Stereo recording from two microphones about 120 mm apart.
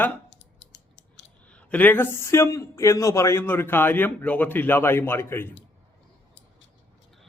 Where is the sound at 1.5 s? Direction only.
10° left (ahead or behind).